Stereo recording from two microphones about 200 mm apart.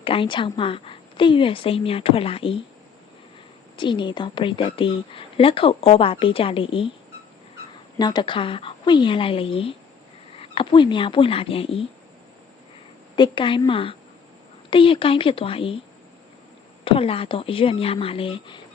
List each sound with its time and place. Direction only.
0.0 s a woman's voice: 25° left (ahead or behind)
3.8 s a woman's voice: 25° left (ahead or behind)
7.9 s a woman's voice: 20° left (ahead or behind)
13.1 s a woman's voice: 25° left (ahead or behind)
16.8 s a woman's voice: 30° left (ahead or behind)